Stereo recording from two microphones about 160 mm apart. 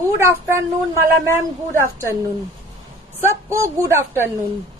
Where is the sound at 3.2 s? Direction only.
15° right (ahead or behind).